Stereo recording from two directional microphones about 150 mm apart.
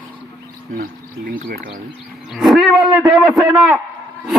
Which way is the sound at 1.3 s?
65° right (ahead or behind).